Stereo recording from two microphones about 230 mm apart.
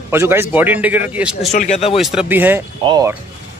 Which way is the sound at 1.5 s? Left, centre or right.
Left.